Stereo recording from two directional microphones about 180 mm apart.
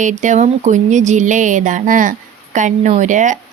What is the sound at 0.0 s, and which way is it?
Speech, 45° right (ahead or behind).